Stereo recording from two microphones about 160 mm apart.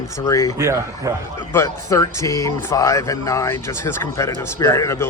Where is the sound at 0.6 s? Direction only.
20° right (ahead or behind).